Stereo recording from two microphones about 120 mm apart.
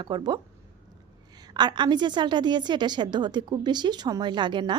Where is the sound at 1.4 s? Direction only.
35° right (ahead or behind).